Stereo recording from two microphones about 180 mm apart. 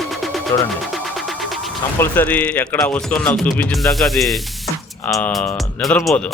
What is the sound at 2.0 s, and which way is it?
Speech, 10° left (ahead or behind).